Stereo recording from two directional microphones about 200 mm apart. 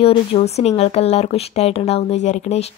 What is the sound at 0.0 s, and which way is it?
Speech, 30° left (ahead or behind).